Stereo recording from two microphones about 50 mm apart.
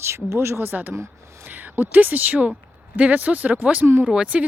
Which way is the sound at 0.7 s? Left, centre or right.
Right.